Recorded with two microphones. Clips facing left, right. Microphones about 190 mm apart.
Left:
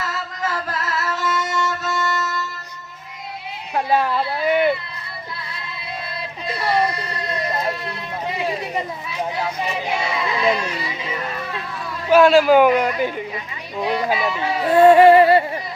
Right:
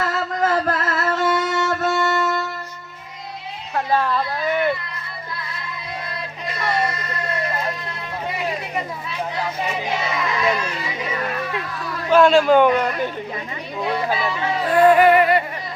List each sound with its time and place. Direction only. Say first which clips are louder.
0.0 s music: right 6 dB; 55° right (ahead or behind)
3.8 s a sound: left 1 dB; 15° left (ahead or behind)
10.2 s speech: left 2 dB; 15° left (ahead or behind)
12.1 s a man's voice: left 1 dB; 5° left (ahead or behind)
14.7 s music: left 3 dB; 25° left (ahead or behind)